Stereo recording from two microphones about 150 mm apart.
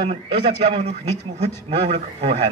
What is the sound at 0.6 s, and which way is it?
A man's voice, 45° right (ahead or behind).